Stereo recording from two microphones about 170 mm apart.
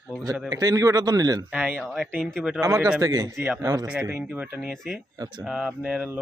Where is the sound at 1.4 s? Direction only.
5° right (ahead or behind).